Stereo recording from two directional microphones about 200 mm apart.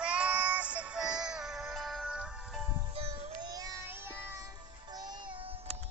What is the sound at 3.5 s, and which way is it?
Music, 15° right (ahead or behind).